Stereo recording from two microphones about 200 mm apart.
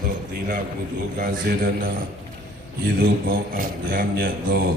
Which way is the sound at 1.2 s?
45° right (ahead or behind).